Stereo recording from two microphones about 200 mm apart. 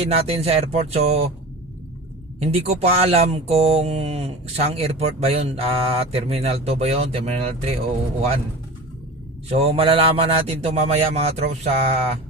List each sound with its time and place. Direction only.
0.0 s speech: 30° right (ahead or behind)
2.5 s speech: 30° right (ahead or behind)
9.5 s a man's voice: 30° right (ahead or behind)